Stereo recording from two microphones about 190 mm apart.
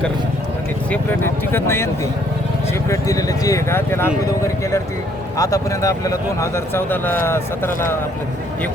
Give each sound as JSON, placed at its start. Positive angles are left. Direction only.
{"t": 0.9, "sound": "speech", "side_deg": 10}
{"t": 2.9, "sound": "speech", "side_deg": 15}
{"t": 5.4, "sound": "speech", "side_deg": 15}